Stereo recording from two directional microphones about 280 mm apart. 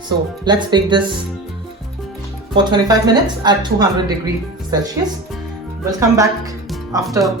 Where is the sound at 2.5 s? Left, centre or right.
Centre.